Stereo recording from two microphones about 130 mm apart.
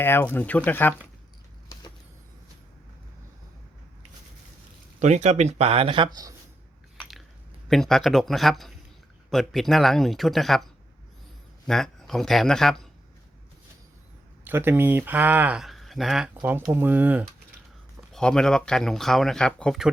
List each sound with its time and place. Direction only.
0.0 s speech: 15° left (ahead or behind)
4.9 s speech: 65° right (ahead or behind); by 6.3 s 30° right (ahead or behind)
7.7 s speech: 5° left (ahead or behind)
14.4 s speech: 15° right (ahead or behind)
16.4 s speech: 15° right (ahead or behind)
18.1 s speech: 5° left (ahead or behind)